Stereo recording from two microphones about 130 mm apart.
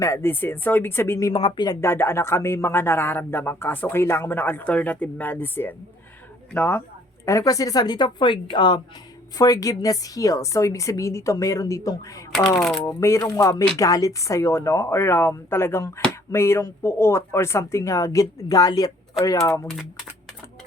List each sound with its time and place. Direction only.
0.0 s speech: 20° left (ahead or behind)
1.3 s speech: 40° left (ahead or behind); by 12.2 s 25° left (ahead or behind)
12.5 s speech: 5° left (ahead or behind)
12.8 s speech: 25° left (ahead or behind)
19.6 s speech: 5° right (ahead or behind)